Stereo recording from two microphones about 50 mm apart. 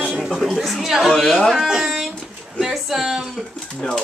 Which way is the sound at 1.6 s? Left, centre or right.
Centre.